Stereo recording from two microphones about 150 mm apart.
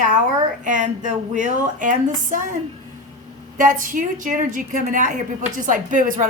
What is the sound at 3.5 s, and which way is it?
A woman's voice, 60° right (ahead or behind).